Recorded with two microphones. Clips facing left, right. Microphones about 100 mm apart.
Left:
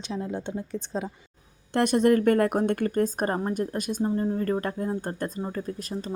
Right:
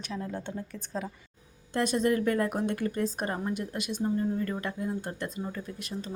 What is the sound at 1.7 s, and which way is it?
A woman's voice, 60° left (ahead or behind).